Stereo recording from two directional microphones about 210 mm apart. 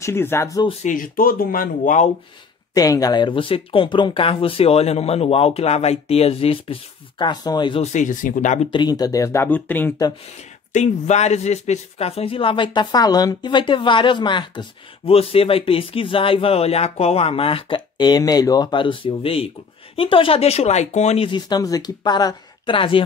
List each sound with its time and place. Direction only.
0.0 s speech: 10° left (ahead or behind)
0.8 s speech: 40° left (ahead or behind)
2.7 s speech: 15° left (ahead or behind); by 8.5 s 40° left (ahead or behind)
8.7 s speech: 20° left (ahead or behind)
10.7 s speech: 35° left (ahead or behind)